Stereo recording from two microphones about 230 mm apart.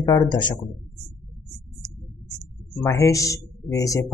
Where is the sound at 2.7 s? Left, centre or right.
Centre.